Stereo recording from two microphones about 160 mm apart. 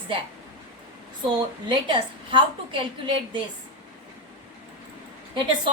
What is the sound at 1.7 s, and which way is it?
A woman's voice, 30° right (ahead or behind).